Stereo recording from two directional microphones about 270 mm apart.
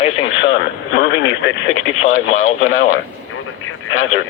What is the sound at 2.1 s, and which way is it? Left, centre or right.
Speech, left.